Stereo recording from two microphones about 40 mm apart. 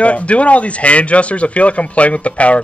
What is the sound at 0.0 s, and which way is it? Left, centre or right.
A man's voice, left.